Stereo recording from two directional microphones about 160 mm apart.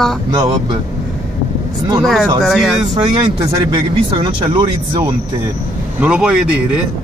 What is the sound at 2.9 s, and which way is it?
Speech, 25° right (ahead or behind).